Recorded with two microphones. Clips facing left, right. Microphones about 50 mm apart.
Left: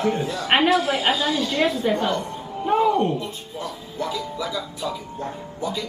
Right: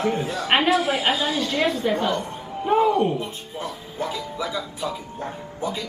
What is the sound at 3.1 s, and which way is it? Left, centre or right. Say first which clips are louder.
Speech: even; right.